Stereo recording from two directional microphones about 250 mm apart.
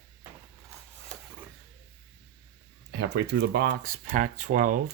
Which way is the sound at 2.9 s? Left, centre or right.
Right.